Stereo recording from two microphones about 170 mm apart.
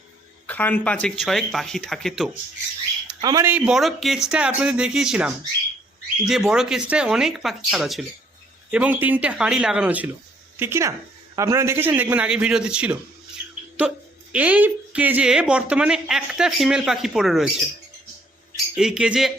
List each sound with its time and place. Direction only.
0.4 s speech: 10° left (ahead or behind)
3.2 s speech: 20° right (ahead or behind)
3.5 s speech: 5° right (ahead or behind)
14.3 s speech: 10° right (ahead or behind)
18.8 s speech: 5° right (ahead or behind)